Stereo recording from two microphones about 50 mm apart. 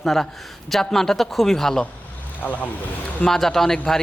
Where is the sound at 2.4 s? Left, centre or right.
Left.